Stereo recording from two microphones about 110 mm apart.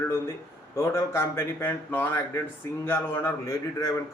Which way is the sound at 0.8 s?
25° left (ahead or behind).